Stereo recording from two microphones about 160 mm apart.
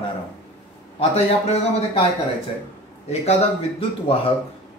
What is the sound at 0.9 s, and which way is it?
Speech, 40° left (ahead or behind).